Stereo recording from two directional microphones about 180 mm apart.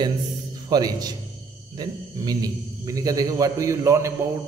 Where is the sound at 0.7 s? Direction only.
20° right (ahead or behind).